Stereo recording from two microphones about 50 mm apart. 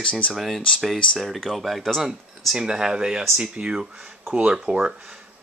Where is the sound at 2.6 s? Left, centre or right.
Centre.